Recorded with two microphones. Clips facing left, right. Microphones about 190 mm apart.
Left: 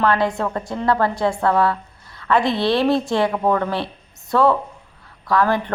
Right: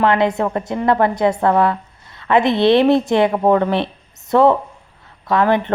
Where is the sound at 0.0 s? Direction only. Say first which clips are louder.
Right 3 dB; 20° right (ahead or behind).